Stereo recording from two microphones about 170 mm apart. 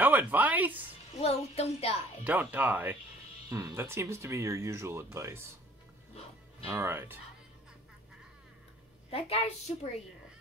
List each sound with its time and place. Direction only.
0.0 s a sound: 10° right (ahead or behind)
1.2 s a woman's voice: 35° left (ahead or behind)
2.2 s speech: 10° right (ahead or behind)
6.7 s speech: 15° right (ahead or behind)
9.1 s a woman's voice: 35° left (ahead or behind)